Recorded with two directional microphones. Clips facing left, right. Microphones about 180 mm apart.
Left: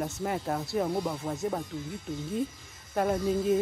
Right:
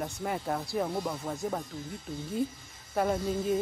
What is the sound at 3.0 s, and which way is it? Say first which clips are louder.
Speech: left 2 dB; centre (ahead or behind).